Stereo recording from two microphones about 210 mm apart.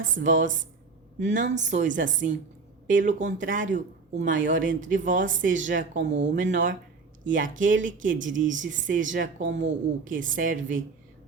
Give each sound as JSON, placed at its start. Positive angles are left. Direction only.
{"t": 0.1, "sound": "speech", "side_deg": -40}